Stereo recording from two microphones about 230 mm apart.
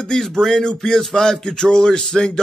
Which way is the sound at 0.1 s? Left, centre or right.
Centre.